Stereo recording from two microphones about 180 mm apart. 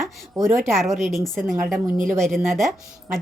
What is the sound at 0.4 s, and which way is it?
A woman's voice, centre (ahead or behind).